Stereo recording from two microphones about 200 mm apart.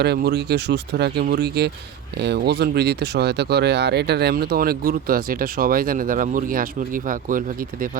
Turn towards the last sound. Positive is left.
turn(degrees=-45)  # may be behind; listen again after turning